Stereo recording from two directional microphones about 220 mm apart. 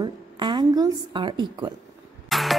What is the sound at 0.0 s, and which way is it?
A woman's voice, 20° right (ahead or behind).